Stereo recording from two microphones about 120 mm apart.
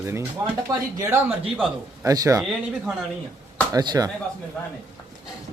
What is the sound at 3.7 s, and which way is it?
Speech, 30° right (ahead or behind).